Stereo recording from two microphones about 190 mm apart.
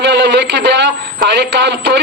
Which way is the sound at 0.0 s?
65° right (ahead or behind).